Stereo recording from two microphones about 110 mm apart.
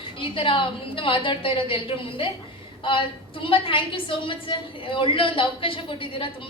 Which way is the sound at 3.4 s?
55° left (ahead or behind).